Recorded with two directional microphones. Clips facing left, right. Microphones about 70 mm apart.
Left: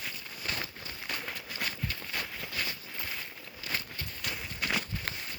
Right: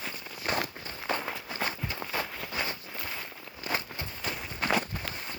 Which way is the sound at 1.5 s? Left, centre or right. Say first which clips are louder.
Right 4 dB; right.